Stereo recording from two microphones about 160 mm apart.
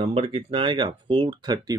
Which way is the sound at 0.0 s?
35° right (ahead or behind).